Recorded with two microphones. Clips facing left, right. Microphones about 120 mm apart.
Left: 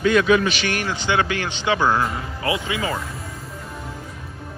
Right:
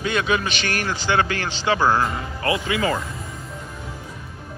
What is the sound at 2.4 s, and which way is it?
Speech, 20° left (ahead or behind).